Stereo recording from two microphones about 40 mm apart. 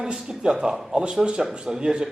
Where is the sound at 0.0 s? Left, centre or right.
Centre.